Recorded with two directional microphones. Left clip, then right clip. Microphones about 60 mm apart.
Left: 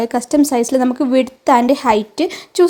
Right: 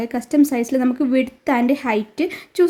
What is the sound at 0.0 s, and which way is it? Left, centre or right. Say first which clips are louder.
A woman's voice: left 3 dB; centre.